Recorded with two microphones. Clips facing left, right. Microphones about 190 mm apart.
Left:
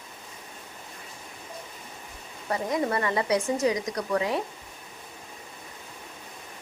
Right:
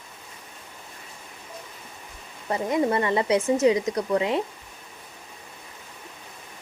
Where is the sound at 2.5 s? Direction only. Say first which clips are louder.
Right 3 dB; 25° right (ahead or behind).